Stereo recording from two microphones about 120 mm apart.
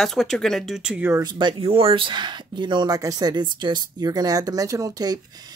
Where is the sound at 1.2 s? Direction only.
40° right (ahead or behind).